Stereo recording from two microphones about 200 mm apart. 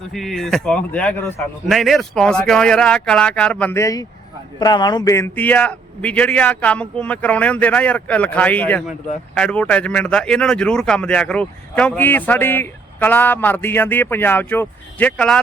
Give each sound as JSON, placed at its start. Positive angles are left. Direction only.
{"t": 0.1, "sound": "a man's voice", "side_deg": 0}